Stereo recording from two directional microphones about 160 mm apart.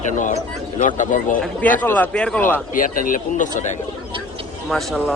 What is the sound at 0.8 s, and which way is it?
Speech, 50° left (ahead or behind).